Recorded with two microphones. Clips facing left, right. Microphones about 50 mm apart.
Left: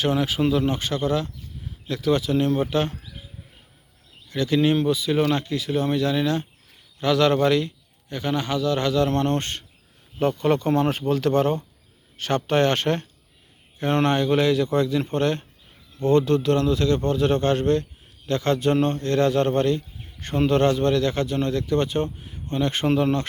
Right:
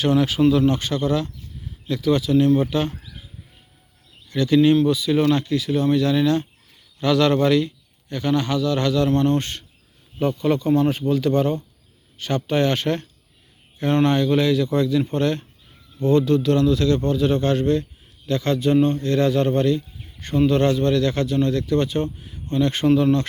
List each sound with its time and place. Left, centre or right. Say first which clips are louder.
0.0 s a man's voice: right 4 dB; centre
4.3 s a man's voice: right 4 dB; left